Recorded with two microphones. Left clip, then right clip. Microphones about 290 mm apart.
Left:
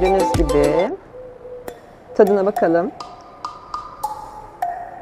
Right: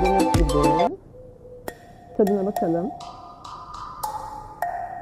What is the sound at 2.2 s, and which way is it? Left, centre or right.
Speech, centre.